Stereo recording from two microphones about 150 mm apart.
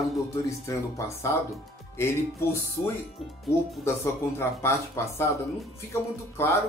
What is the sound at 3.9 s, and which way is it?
Speech, 20° left (ahead or behind).